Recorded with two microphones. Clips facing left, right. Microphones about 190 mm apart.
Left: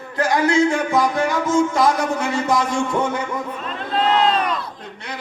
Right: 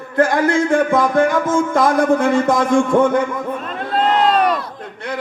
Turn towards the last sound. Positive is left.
turn(degrees=-50)  # may be behind; listen again after turning